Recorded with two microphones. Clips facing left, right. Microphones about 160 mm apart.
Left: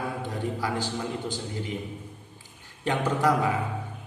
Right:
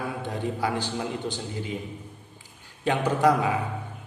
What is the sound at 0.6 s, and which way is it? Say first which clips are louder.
A man's voice: right 2 dB; 20° right (ahead or behind).